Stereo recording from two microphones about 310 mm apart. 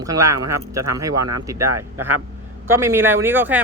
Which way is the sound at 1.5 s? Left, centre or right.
Centre.